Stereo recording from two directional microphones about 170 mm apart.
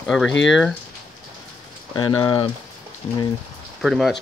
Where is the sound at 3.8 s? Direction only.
Centre (ahead or behind).